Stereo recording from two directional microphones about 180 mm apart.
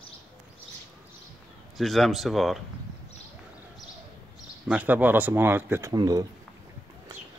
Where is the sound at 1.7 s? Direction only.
Centre (ahead or behind).